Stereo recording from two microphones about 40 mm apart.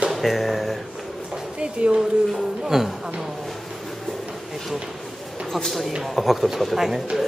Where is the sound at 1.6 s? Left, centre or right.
Right.